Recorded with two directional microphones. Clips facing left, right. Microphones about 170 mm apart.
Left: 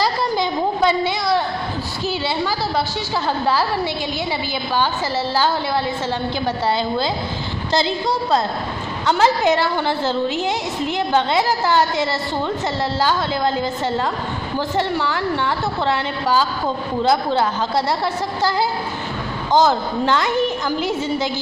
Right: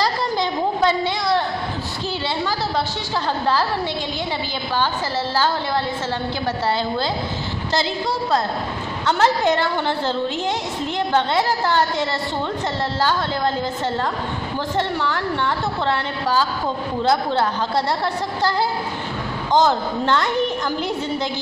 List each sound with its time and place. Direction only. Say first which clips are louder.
0.0 s a sound: left 1 dB; 10° left (ahead or behind)
9.0 s a woman's voice: left 2 dB; 10° left (ahead or behind)
19.5 s a woman's voice: left 1 dB; 5° left (ahead or behind)